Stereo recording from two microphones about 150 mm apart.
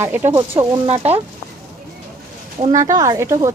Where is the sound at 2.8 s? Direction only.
25° right (ahead or behind).